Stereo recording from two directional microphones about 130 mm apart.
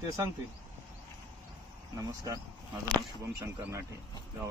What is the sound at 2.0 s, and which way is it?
Speech, 25° right (ahead or behind).